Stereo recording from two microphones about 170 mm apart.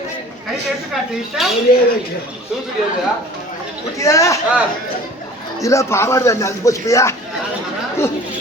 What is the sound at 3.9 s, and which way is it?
Speech, 20° left (ahead or behind).